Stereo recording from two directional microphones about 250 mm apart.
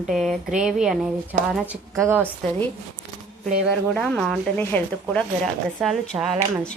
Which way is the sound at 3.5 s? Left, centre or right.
Centre.